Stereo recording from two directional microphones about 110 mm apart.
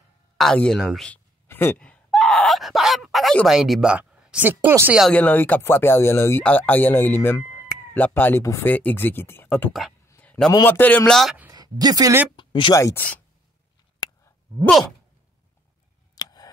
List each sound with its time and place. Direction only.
0.4 s speech: 5° left (ahead or behind)
1.5 s speech: 20° left (ahead or behind)
1.8 s groan: 5° left (ahead or behind)
3.4 s speech: centre (ahead or behind); by 4.9 s 20° right (ahead or behind)
5.1 s speech: 15° left (ahead or behind)
9.7 s speech: centre (ahead or behind)
10.0 s a sound: 20° left (ahead or behind)
10.6 s speech: 15° left (ahead or behind)
11.5 s a woman's voice: 35° right (ahead or behind)
12.4 s a sound: 50° left (ahead or behind)
12.7 s speech: 25° left (ahead or behind)
14.0 s a sound: 40° left (ahead or behind)
16.2 s a sound: 35° left (ahead or behind)